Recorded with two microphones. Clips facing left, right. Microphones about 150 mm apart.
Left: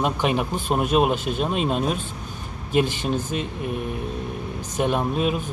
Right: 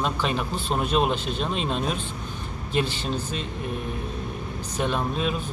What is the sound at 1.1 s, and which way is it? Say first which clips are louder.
Speech: left 3 dB; 50° left (ahead or behind).